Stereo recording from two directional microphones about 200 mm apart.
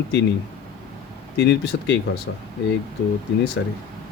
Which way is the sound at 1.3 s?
60° left (ahead or behind).